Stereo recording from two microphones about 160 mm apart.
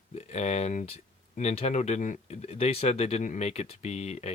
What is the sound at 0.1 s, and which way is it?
Speech, 45° left (ahead or behind).